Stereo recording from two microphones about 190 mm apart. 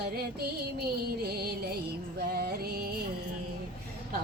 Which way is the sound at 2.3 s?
55° right (ahead or behind).